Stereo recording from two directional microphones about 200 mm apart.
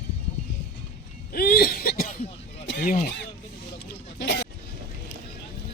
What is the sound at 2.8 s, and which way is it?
Speech, 40° left (ahead or behind).